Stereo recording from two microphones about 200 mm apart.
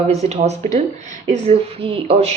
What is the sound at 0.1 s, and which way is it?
Speech, 35° right (ahead or behind).